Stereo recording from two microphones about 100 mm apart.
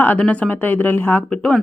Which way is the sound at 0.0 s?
15° left (ahead or behind).